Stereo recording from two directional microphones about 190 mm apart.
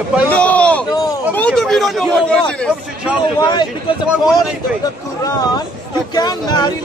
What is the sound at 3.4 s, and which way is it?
Speech, 20° left (ahead or behind).